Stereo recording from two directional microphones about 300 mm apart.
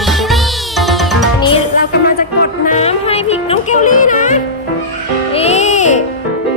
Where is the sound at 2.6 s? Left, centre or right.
Left.